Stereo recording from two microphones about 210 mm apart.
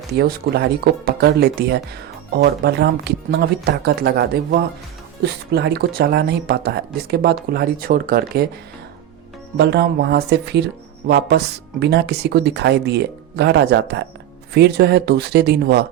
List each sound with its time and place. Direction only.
0.2 s speech: 50° right (ahead or behind)
9.6 s speech: 55° right (ahead or behind)